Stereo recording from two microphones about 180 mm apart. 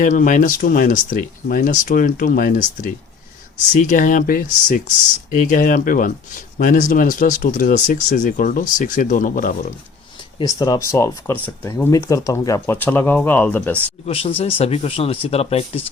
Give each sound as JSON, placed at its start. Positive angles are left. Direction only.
{"t": 0.0, "sound": "speech", "side_deg": 45}
{"t": 10.3, "sound": "speech", "side_deg": 20}
{"t": 14.1, "sound": "speech", "side_deg": 30}